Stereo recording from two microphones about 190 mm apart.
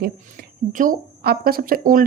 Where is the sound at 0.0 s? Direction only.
50° right (ahead or behind).